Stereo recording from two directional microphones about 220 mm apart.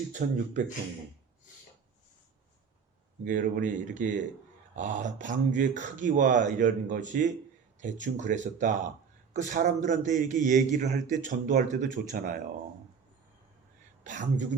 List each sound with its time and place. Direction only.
0.1 s a man's voice: 35° right (ahead or behind)
3.2 s a man's voice: 35° right (ahead or behind)
14.0 s a woman's voice: 35° right (ahead or behind)